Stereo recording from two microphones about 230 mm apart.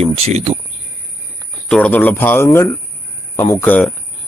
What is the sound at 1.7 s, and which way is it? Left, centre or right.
Speech, centre.